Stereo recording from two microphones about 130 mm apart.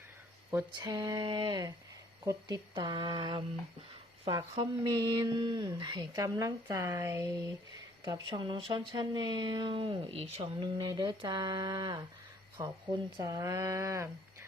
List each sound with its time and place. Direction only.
0.5 s speech: 30° right (ahead or behind)
8.3 s speech: 40° right (ahead or behind)